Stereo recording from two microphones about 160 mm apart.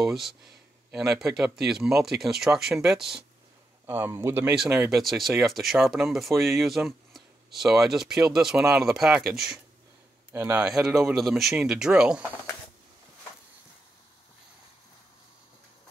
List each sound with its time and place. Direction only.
0.0 s speech: centre (ahead or behind)
3.8 s speech: 15° right (ahead or behind)
10.3 s speech: 15° right (ahead or behind)
10.6 s speech: 5° right (ahead or behind)